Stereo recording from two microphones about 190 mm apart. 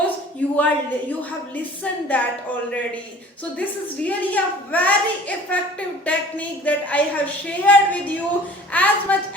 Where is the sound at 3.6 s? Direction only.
10° left (ahead or behind).